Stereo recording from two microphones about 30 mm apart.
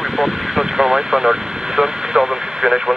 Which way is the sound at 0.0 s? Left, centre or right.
Centre.